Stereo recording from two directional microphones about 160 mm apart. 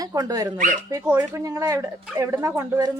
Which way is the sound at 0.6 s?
55° right (ahead or behind).